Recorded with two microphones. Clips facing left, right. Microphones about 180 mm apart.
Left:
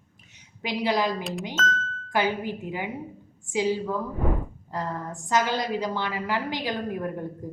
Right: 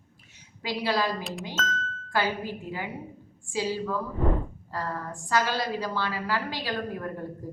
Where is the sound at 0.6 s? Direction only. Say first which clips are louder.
Left 2 dB; 20° left (ahead or behind).